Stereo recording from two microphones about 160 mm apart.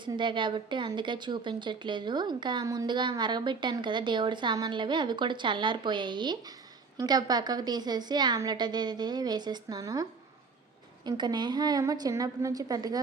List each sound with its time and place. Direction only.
0.0 s a woman's voice: 30° right (ahead or behind)